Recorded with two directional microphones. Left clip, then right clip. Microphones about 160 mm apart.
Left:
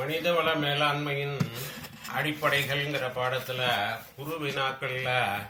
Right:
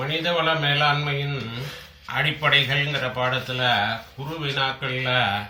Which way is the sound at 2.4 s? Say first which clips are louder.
Right 7 dB; 20° left (ahead or behind).